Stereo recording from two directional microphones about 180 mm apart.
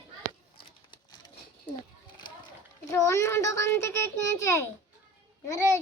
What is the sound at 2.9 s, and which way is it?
A child's voice, 15° left (ahead or behind).